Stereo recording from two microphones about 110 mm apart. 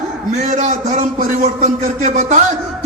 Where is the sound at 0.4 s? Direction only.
90° right.